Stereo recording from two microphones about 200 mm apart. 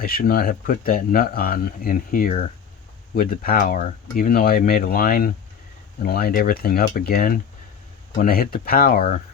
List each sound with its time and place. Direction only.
0.0 s speech: 45° left (ahead or behind)